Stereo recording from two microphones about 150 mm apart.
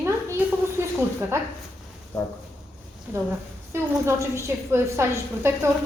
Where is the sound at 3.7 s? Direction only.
15° right (ahead or behind).